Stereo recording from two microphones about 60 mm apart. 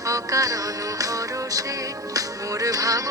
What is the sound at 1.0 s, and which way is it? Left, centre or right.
Music, right.